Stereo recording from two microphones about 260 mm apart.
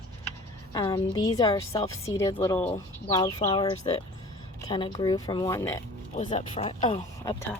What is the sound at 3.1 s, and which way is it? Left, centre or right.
Speech, centre.